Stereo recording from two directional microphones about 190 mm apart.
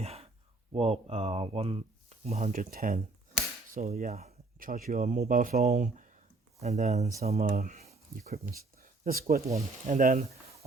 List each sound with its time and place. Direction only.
0.0 s a sound: 35° right (ahead or behind)
0.7 s speech: 30° right (ahead or behind)
3.7 s cap gun: 35° right (ahead or behind)
3.9 s speech: 50° right (ahead or behind)
7.5 s a sound: 45° right (ahead or behind)
8.3 s speech: 50° right (ahead or behind)
9.6 s speech: 35° right (ahead or behind)
10.0 s speech: 50° right (ahead or behind)